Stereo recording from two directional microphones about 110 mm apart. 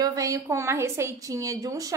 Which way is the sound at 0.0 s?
30° right (ahead or behind).